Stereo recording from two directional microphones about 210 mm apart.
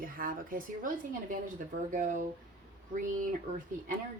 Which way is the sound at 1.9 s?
40° right (ahead or behind).